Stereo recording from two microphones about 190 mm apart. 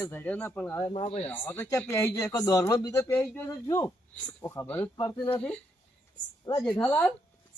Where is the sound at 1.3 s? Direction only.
10° left (ahead or behind).